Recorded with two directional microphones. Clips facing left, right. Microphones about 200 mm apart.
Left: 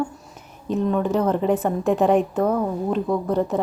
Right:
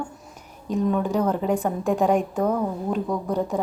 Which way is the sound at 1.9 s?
10° right (ahead or behind).